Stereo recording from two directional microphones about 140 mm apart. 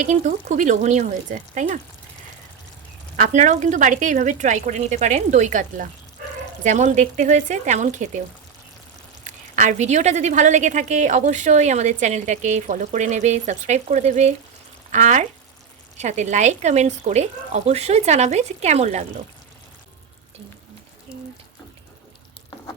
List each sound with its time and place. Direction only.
0.0 s a woman's voice: 65° right (ahead or behind)
3.2 s a woman's voice: 60° right (ahead or behind)
6.7 s a woman's voice: 60° right (ahead or behind)
9.2 s a woman's voice: 60° right (ahead or behind)